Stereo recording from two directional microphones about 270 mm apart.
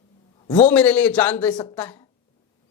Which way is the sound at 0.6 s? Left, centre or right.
Centre.